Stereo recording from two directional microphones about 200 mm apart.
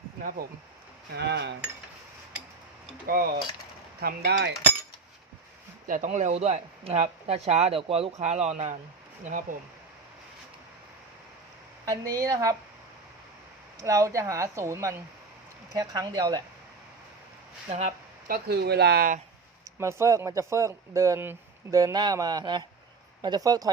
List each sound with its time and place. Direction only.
0.2 s speech: 45° right (ahead or behind)
1.1 s speech: 55° right (ahead or behind)
4.0 s speech: 55° right (ahead or behind)
5.9 s speech: 40° right (ahead or behind)
11.9 s speech: 20° right (ahead or behind)
13.8 s speech: 15° right (ahead or behind)
17.7 s speech: 35° right (ahead or behind)
18.4 s speech: 55° right (ahead or behind)
19.8 s speech: 15° right (ahead or behind)